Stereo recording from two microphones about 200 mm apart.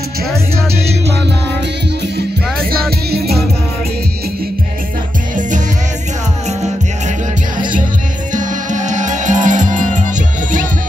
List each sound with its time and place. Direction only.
2.7 s music: 50° right (ahead or behind)
8.3 s music: 40° right (ahead or behind)